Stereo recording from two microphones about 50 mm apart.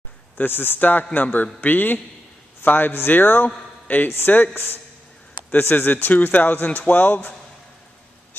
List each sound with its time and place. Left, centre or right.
0.4 s a man's voice: left
5.5 s a man's voice: left